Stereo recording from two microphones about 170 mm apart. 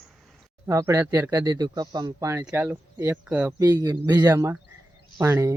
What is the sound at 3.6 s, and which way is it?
Speech, 20° right (ahead or behind).